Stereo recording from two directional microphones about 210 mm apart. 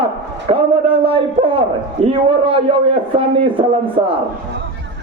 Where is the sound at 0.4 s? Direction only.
25° right (ahead or behind).